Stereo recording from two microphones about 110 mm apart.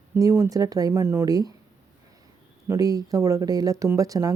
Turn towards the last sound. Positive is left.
turn(degrees=-30)  # may be behind; listen again after turning